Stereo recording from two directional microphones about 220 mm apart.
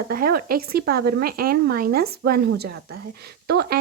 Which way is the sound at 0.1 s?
40° right (ahead or behind).